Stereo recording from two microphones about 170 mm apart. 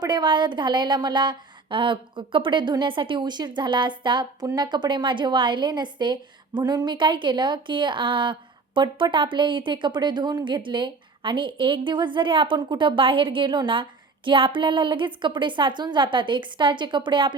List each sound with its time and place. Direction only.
0.0 s a woman's voice: 25° right (ahead or behind)